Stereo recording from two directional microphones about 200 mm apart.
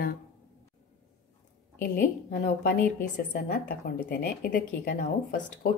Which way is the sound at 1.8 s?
50° left (ahead or behind).